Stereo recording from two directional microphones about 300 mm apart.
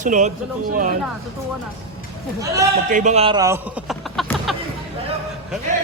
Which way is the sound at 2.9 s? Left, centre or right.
Right.